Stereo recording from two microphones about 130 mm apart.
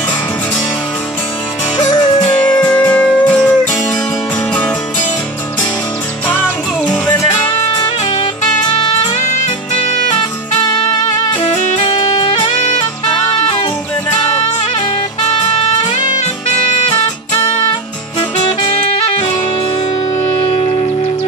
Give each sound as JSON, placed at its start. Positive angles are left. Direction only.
{"t": 1.8, "sound": "music", "side_deg": 35}
{"t": 2.6, "sound": "music", "side_deg": 10}
{"t": 6.2, "sound": "music", "side_deg": 10}
{"t": 7.7, "sound": "music", "side_deg": 35}
{"t": 10.7, "sound": "music", "side_deg": 30}
{"t": 11.8, "sound": "music", "side_deg": 40}
{"t": 15.9, "sound": "music", "side_deg": 65}